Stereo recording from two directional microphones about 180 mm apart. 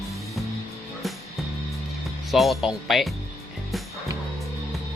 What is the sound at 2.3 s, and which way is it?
Speech, centre (ahead or behind).